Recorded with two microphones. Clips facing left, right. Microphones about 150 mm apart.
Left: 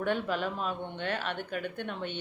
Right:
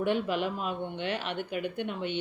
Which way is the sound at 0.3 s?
10° right (ahead or behind).